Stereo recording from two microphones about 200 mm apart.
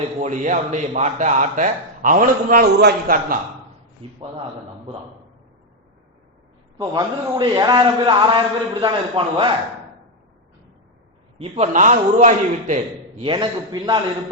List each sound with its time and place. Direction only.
0.2 s speech: 35° right (ahead or behind)
6.7 s a man's voice: 20° right (ahead or behind)
11.3 s a man's voice: 30° right (ahead or behind)